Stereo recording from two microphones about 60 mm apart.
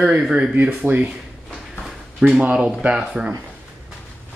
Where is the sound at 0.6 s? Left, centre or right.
Centre.